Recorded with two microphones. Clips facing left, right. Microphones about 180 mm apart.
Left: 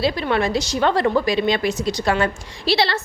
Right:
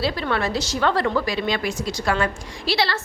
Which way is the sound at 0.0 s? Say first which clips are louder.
Left 3 dB; 20° left (ahead or behind).